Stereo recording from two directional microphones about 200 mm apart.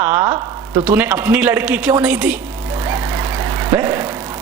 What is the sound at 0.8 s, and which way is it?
A woman's voice, 10° right (ahead or behind).